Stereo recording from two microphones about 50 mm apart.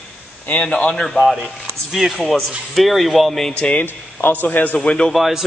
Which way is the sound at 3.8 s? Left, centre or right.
Left.